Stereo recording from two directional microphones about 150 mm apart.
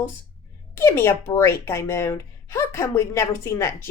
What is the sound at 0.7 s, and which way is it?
A woman's voice, 15° left (ahead or behind).